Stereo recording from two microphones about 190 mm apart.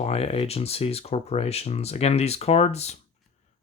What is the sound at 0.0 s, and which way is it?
Speech, 30° left (ahead or behind).